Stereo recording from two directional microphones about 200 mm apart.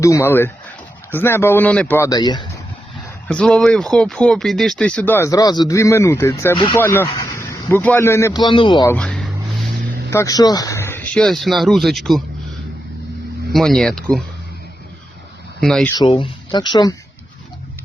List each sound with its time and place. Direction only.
0.0 s a man's voice: 15° left (ahead or behind)
3.2 s a man's voice: 5° left (ahead or behind); by 8.9 s 25° left (ahead or behind)
8.9 s speech: 5° left (ahead or behind)
10.1 s speech: 15° left (ahead or behind)
13.5 s speech: centre (ahead or behind)
15.6 s speech: centre (ahead or behind)
16.0 s speech: 25° left (ahead or behind)